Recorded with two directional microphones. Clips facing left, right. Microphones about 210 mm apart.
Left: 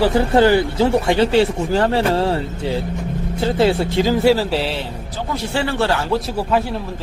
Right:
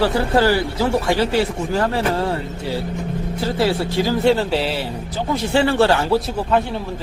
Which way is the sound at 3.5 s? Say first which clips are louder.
Left 3 dB; 20° left (ahead or behind).